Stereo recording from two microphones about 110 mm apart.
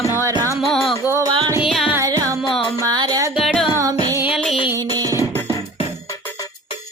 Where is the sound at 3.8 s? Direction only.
35° right (ahead or behind).